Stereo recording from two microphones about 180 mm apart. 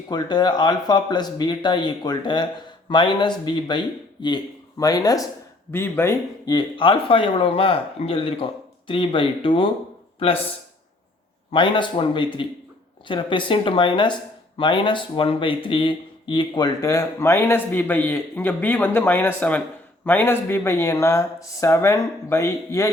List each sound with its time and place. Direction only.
0.1 s speech: 25° left (ahead or behind)
11.5 s speech: 25° left (ahead or behind)